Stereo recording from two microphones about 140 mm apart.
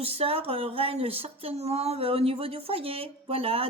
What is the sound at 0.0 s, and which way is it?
Speech, 45° right (ahead or behind).